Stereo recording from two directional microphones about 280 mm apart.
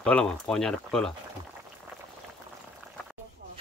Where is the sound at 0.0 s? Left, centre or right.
Centre.